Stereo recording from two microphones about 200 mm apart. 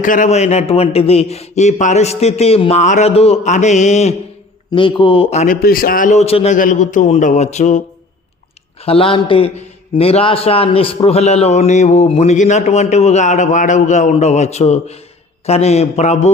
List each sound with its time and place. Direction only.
0.0 s a man's voice: 40° left (ahead or behind)
4.7 s a man's voice: 25° left (ahead or behind)
5.6 s a man's voice: 45° left (ahead or behind)
8.8 s a man's voice: 30° left (ahead or behind)